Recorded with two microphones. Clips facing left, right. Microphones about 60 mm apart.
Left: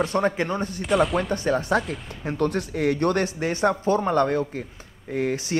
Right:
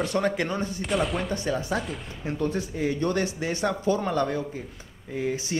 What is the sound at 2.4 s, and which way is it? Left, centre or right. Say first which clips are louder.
Speech: left 4 dB; left.